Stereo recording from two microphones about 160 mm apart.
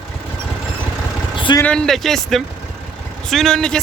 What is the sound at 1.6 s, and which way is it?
Speech, 5° left (ahead or behind).